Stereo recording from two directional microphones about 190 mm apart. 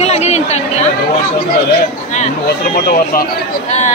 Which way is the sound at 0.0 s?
35° left (ahead or behind).